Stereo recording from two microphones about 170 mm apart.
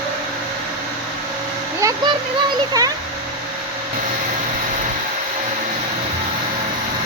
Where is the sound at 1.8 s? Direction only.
20° right (ahead or behind).